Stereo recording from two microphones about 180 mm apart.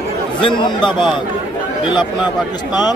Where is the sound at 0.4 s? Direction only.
25° left (ahead or behind).